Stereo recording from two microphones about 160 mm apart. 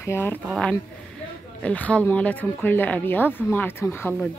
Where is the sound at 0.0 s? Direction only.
15° left (ahead or behind).